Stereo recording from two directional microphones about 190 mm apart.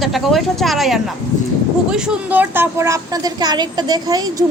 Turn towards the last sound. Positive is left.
turn(degrees=-20)  # may be behind; listen again after turning